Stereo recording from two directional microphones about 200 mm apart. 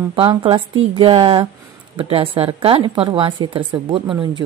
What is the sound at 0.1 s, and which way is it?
Speech, 25° right (ahead or behind).